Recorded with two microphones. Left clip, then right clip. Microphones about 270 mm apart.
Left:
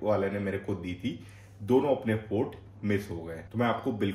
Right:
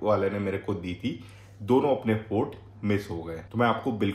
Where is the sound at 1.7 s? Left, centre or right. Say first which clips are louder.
Right 2 dB; centre.